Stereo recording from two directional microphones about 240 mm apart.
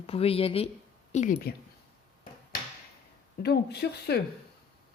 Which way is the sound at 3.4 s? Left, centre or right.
Left.